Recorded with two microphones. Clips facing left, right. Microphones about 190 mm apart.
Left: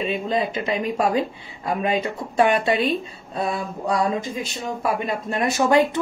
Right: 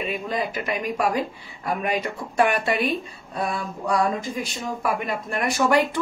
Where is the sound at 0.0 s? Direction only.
25° left (ahead or behind).